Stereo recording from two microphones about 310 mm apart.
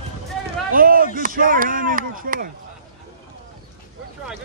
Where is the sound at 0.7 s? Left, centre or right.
Right.